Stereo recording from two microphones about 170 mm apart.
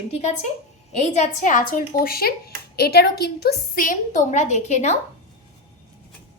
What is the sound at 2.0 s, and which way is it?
A woman's voice, 65° left (ahead or behind).